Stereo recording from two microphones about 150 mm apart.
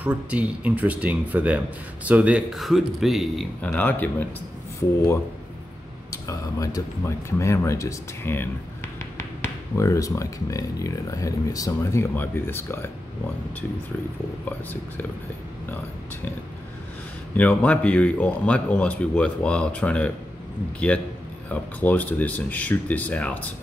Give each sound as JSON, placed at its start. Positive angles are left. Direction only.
{"t": 0.0, "sound": "speech", "side_deg": -10}
{"t": 3.6, "sound": "speech", "side_deg": 10}
{"t": 6.2, "sound": "speech", "side_deg": 25}
{"t": 17.4, "sound": "speech", "side_deg": 10}
{"t": 21.5, "sound": "speech", "side_deg": 10}